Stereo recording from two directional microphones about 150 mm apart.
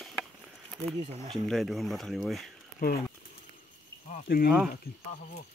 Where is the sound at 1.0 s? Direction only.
40° right (ahead or behind).